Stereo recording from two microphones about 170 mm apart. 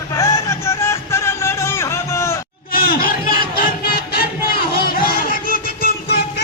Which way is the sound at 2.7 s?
60° left (ahead or behind).